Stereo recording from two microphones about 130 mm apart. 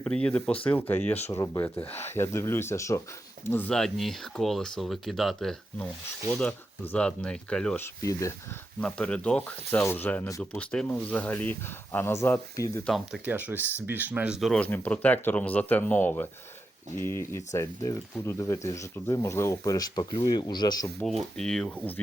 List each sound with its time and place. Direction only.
0.0 s speech: 5° left (ahead or behind)
1.3 s speech: 25° left (ahead or behind)
3.7 s speech: 5° left (ahead or behind)
8.8 s speech: 10° left (ahead or behind)
10.2 s speech: 25° left (ahead or behind)
10.6 s speech: 10° left (ahead or behind)
12.8 s speech: centre (ahead or behind)
13.2 s speech: 10° right (ahead or behind)
14.6 s speech: 10° left (ahead or behind); by 20.9 s 35° left (ahead or behind)
21.0 s speech: 5° left (ahead or behind)